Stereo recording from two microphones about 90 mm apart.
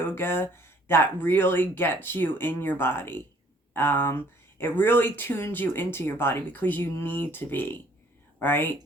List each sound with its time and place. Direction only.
0.0 s speech: 25° left (ahead or behind)